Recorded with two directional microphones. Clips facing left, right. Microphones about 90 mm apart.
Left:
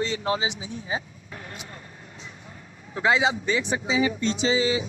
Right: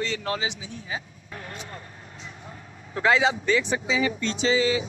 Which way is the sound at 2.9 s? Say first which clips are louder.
Right 1 dB; 15° left (ahead or behind).